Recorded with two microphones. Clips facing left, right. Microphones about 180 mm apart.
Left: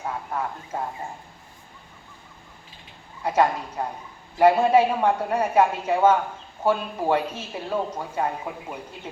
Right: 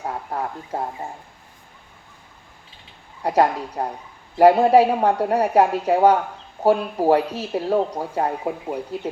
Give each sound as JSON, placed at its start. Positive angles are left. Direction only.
{"t": 0.0, "sound": "speech", "side_deg": -40}
{"t": 3.2, "sound": "speech", "side_deg": -40}